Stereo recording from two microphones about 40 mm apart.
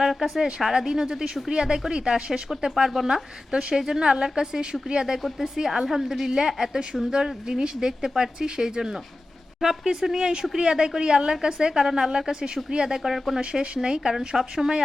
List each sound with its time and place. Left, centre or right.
0.0 s a woman's voice: centre
13.4 s speech: right